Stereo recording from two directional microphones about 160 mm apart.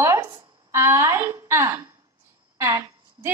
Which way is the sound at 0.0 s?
15° right (ahead or behind).